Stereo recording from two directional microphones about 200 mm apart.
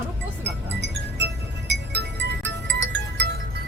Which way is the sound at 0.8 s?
60° right (ahead or behind).